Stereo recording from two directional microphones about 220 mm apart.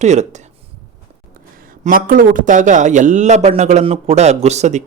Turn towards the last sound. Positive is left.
turn(degrees=-30)  # may be behind; listen again after turning